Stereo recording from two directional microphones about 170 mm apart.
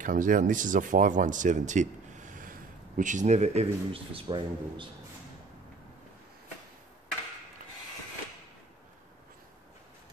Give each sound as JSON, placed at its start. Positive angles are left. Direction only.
{"t": 0.0, "sound": "speech", "side_deg": -50}